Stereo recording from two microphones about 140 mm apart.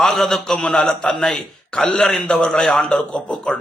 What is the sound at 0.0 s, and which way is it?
A man's voice, centre (ahead or behind).